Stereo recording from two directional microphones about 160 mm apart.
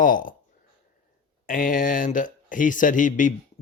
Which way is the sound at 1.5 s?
60° left (ahead or behind).